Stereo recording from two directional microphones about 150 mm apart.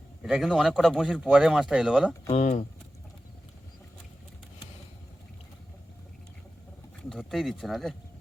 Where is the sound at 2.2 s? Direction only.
50° left (ahead or behind).